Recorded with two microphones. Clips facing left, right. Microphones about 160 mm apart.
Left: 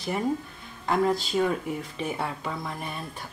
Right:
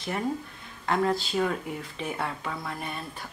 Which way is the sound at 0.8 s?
5° left (ahead or behind).